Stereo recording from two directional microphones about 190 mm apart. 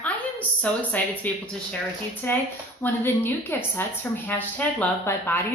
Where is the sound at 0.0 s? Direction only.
5° left (ahead or behind).